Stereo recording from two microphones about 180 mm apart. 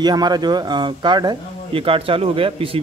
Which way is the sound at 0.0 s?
25° right (ahead or behind).